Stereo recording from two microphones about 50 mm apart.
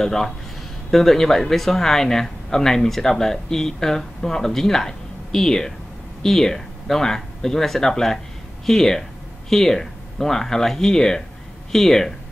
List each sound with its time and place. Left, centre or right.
0.0 s speech: centre